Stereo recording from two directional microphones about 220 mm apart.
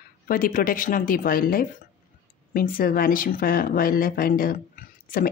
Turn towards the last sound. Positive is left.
turn(degrees=40)  # may be behind; listen again after turning